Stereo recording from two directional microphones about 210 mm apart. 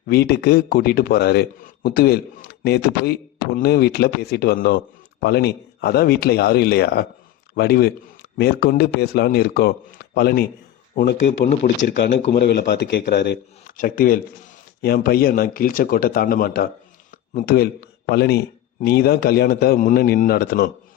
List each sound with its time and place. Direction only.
0.1 s a man's voice: 50° left (ahead or behind)
11.8 s a man's voice: 55° left (ahead or behind)